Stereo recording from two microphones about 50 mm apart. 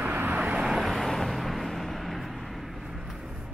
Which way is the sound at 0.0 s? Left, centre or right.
Right.